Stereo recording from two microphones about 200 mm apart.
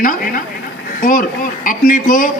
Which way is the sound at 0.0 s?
45° left (ahead or behind).